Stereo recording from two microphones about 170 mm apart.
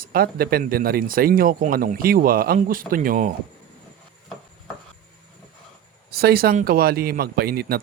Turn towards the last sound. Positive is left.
turn(degrees=-65)  # may be behind; listen again after turning